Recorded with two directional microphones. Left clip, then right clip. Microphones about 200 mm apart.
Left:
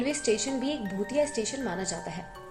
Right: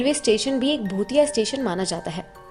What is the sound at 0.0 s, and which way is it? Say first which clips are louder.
Speech: right 8 dB; 45° right (ahead or behind).